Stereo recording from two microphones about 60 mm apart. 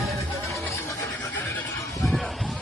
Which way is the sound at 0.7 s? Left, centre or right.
Left.